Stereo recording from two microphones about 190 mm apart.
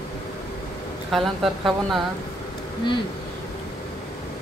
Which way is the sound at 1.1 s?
Centre (ahead or behind).